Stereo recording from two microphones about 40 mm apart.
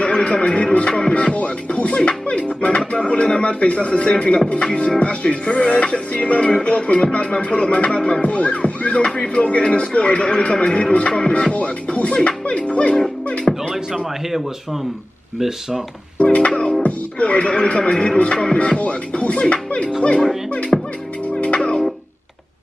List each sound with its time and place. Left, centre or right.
0.0 s music: left
2.9 s speech: left
4.6 s music: left
11.5 s speech: left
13.5 s speech: centre
13.9 s a man's voice: centre
16.2 s music: left
16.8 s speech: left
20.7 s music: centre
21.4 s music: left